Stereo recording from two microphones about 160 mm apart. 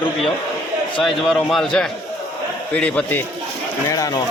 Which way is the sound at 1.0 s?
Centre (ahead or behind).